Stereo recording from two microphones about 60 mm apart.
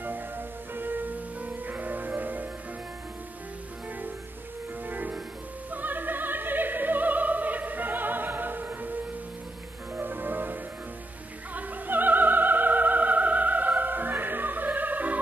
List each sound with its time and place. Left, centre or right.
0.0 s music: right
4.8 s music: right
5.7 s opera: right
9.9 s music: right